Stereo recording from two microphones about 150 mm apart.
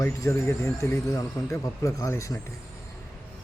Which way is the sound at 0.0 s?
15° left (ahead or behind).